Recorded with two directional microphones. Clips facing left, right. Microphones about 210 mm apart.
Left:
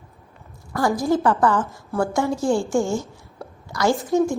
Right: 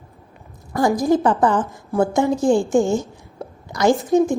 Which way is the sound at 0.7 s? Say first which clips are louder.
Right 3 dB; 20° right (ahead or behind).